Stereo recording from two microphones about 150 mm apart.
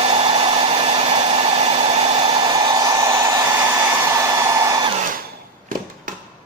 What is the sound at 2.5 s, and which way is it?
Hair dryer, 25° right (ahead or behind).